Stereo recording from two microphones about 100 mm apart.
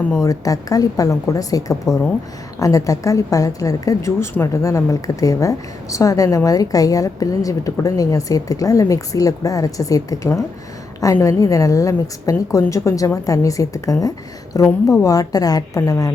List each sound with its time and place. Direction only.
0.2 s a woman's voice: 35° left (ahead or behind)